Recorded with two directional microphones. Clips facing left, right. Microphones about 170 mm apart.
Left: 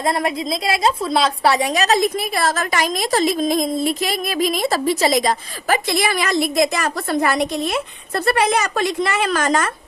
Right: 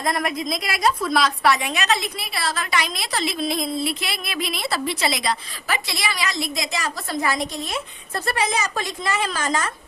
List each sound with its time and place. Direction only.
0.7 s a woman's voice: 25° left (ahead or behind); by 9.6 s 65° left (ahead or behind)